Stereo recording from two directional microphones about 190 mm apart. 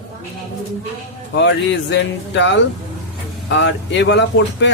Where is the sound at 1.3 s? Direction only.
75° left (ahead or behind).